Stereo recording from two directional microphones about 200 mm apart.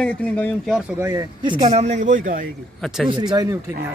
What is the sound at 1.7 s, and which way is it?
Speech, 35° right (ahead or behind).